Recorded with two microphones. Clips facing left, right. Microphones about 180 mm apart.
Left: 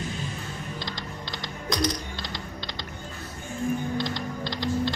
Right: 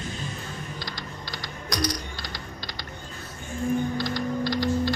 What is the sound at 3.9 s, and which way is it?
Typing, 20° left (ahead or behind).